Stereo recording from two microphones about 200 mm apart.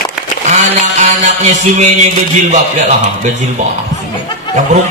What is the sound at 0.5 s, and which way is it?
Music, 35° right (ahead or behind).